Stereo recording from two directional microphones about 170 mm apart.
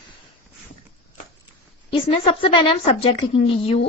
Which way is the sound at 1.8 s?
30° left (ahead or behind).